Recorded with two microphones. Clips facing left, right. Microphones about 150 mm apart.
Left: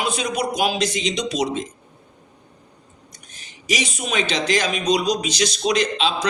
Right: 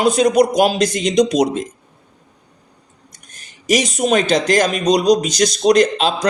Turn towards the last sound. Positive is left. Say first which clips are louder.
# right 6 dB
turn(degrees=-45)  # may be behind; listen again after turning